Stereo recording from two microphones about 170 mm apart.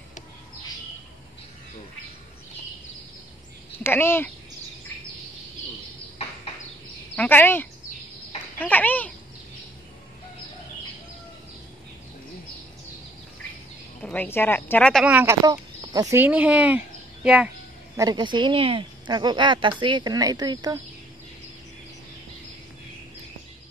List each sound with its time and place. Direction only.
3.8 s speech: 15° left (ahead or behind)
7.2 s speech: 10° left (ahead or behind)
14.0 s speech: 10° left (ahead or behind)
15.0 s speech: 10° right (ahead or behind)
15.4 s speech: 25° right (ahead or behind); by 17.5 s 5° right (ahead or behind)
17.9 s speech: 25° right (ahead or behind)